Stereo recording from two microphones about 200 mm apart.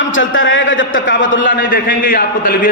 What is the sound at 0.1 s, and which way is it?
A man's voice, 75° left (ahead or behind).